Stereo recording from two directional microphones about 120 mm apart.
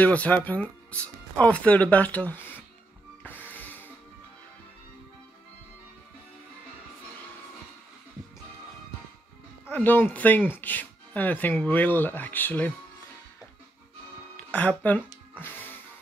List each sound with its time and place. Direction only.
0.0 s speech: 10° left (ahead or behind)
3.3 s music: 15° left (ahead or behind)
9.7 s speech: 15° left (ahead or behind)
14.3 s speech: 10° left (ahead or behind)
15.3 s music: 15° left (ahead or behind)